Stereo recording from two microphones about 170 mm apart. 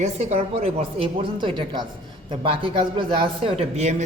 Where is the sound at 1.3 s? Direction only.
25° right (ahead or behind).